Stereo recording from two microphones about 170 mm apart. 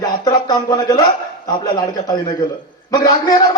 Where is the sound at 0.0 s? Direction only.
25° left (ahead or behind).